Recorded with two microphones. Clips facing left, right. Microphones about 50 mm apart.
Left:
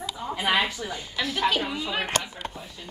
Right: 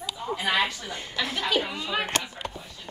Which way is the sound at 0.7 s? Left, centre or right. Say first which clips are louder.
Left 3 dB; centre.